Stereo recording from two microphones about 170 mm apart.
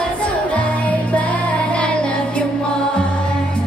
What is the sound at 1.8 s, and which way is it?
Music, 5° left (ahead or behind).